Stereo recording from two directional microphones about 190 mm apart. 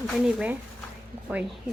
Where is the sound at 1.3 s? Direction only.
5° right (ahead or behind).